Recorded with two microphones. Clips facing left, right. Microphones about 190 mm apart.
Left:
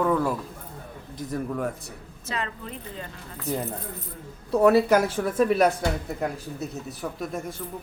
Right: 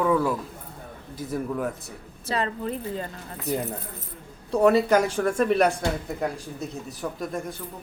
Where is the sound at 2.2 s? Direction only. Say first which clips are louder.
Right 6 dB; 35° right (ahead or behind).